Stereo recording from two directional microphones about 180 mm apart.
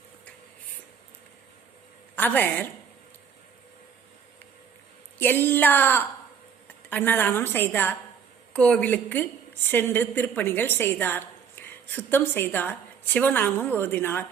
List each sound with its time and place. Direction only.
2.1 s a woman's voice: 10° left (ahead or behind)
5.2 s a woman's voice: 10° left (ahead or behind)